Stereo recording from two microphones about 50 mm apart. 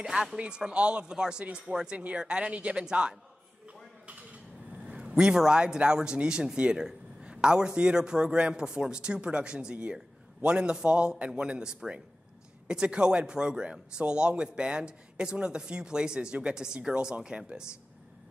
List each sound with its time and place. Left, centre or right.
0.0 s a man's voice: centre
2.0 s a man's voice: right
3.6 s a sound: right
4.8 s a man's voice: right